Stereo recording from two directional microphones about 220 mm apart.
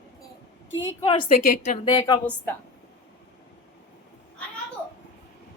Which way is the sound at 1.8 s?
20° left (ahead or behind).